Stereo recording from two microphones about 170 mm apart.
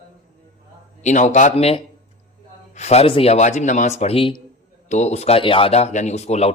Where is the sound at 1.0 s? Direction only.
45° left (ahead or behind).